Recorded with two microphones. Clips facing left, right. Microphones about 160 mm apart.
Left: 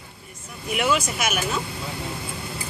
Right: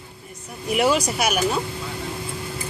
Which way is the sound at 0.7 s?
35° right (ahead or behind).